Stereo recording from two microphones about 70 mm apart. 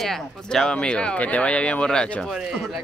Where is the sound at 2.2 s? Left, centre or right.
Centre.